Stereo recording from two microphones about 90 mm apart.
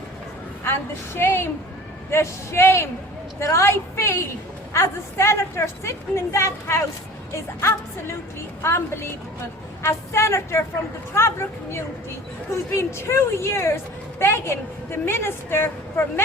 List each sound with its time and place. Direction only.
0.6 s a woman's voice: 25° left (ahead or behind)
8.6 s a woman's voice: 25° left (ahead or behind)